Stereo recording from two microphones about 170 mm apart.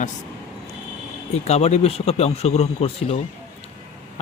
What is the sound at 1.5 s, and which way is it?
Speech, 40° left (ahead or behind).